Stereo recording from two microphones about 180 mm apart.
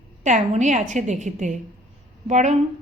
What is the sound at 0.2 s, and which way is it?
A woman's voice, 40° right (ahead or behind).